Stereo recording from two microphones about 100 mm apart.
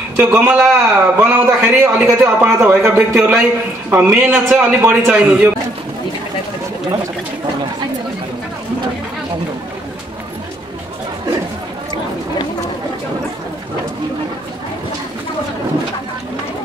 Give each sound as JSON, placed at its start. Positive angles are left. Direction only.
{"t": 0.2, "sound": "a man's voice", "side_deg": -20}